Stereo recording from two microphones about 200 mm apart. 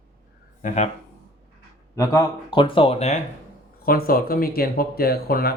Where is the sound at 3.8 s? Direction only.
45° left (ahead or behind).